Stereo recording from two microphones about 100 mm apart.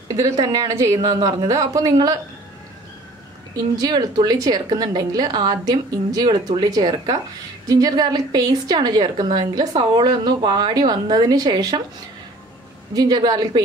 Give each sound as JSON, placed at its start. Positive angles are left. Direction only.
{"t": 0.1, "sound": "a woman's voice", "side_deg": -35}
{"t": 3.5, "sound": "a woman's voice", "side_deg": -40}
{"t": 12.9, "sound": "a woman's voice", "side_deg": -45}